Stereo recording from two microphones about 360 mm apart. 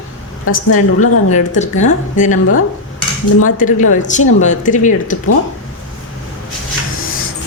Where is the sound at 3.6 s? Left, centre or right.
Left.